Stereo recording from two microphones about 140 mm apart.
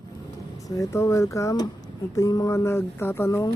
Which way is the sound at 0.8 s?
20° left (ahead or behind).